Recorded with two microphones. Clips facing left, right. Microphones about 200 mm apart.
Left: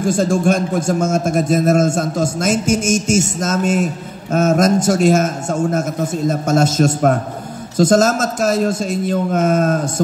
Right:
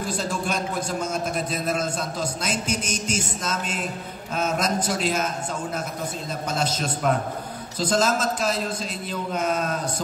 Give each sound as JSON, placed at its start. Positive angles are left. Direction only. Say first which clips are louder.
{"t": 0.0, "sound": "a man's voice", "louder": "left 12 dB", "side_deg": 45}